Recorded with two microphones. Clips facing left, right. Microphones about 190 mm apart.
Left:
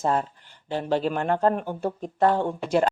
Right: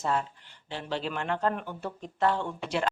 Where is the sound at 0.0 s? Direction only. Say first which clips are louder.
Left 5 dB; 45° left (ahead or behind).